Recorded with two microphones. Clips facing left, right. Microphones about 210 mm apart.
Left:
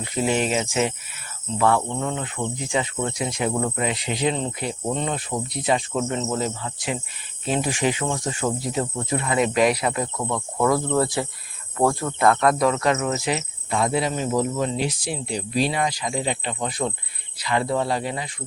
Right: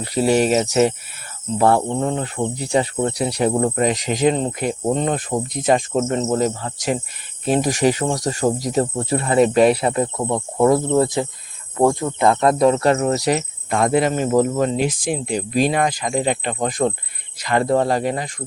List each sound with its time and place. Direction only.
0.0 s speech: 35° right (ahead or behind)